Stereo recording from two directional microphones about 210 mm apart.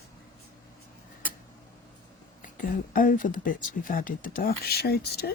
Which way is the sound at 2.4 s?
40° left (ahead or behind).